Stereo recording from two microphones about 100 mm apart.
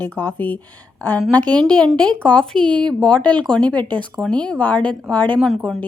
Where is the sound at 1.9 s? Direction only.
10° left (ahead or behind).